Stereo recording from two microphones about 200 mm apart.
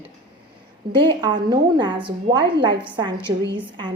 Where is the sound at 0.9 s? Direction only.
25° right (ahead or behind).